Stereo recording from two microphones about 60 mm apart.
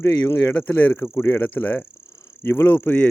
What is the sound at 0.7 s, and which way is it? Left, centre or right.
Speech, left.